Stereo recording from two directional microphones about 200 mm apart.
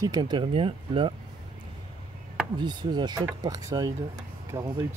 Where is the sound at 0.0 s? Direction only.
20° right (ahead or behind).